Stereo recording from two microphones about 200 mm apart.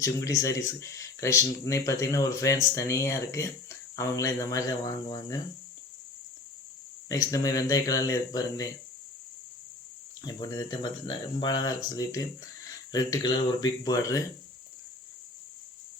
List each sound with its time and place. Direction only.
0.0 s speech: 15° left (ahead or behind)
7.1 s speech: 15° left (ahead or behind)
10.2 s speech: 20° left (ahead or behind)